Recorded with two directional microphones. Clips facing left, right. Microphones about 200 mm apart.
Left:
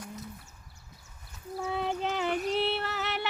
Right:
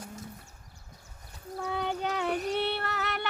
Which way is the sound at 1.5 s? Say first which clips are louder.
Left 1 dB; centre (ahead or behind).